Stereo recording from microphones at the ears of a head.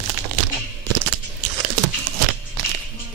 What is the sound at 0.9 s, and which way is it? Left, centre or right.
Biting, right.